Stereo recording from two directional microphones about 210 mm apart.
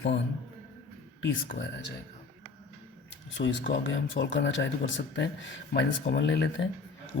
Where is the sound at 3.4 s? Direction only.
45° left (ahead or behind).